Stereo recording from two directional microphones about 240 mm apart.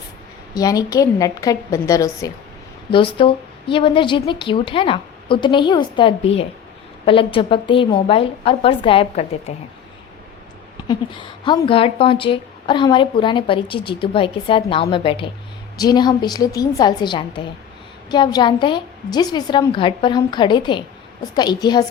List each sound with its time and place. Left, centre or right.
0.5 s a woman's voice: centre
10.8 s a woman's voice: centre